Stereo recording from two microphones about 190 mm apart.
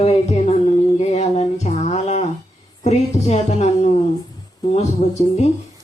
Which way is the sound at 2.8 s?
35° left (ahead or behind).